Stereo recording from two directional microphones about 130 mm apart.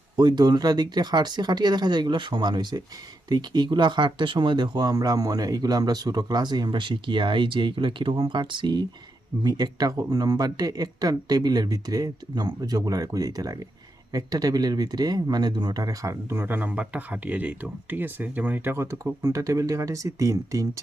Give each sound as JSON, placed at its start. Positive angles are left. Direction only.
{"t": 0.2, "sound": "speech", "side_deg": -30}